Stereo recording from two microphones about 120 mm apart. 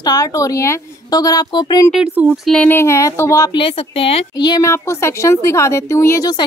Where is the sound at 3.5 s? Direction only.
45° left (ahead or behind).